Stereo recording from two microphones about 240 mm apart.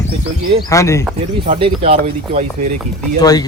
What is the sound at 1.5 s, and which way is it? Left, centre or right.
Speech, right.